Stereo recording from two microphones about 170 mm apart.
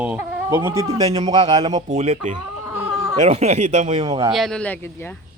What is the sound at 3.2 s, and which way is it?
Speech, 40° right (ahead or behind).